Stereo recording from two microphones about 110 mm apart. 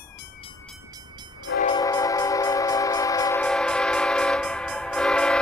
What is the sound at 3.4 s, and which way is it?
Train, 5° left (ahead or behind).